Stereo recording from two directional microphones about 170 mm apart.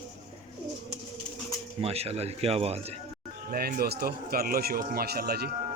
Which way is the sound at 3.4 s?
60° right (ahead or behind).